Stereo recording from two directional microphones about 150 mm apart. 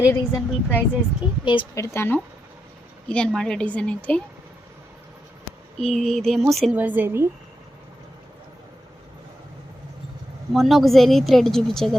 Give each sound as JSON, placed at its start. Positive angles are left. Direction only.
{"t": 0.1, "sound": "a woman's voice", "side_deg": 15}
{"t": 5.8, "sound": "a woman's voice", "side_deg": 0}
{"t": 6.7, "sound": "a woman's voice", "side_deg": -10}
{"t": 10.5, "sound": "a woman's voice", "side_deg": 0}